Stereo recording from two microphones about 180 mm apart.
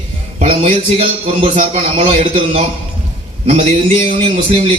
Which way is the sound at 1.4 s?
40° right (ahead or behind).